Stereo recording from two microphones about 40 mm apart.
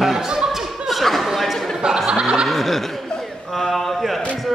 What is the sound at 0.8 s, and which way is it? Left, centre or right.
Chatter, centre.